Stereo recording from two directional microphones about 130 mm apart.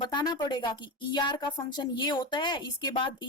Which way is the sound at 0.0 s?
35° left (ahead or behind).